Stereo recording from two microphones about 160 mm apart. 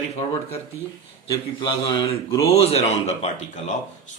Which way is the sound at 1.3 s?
30° left (ahead or behind).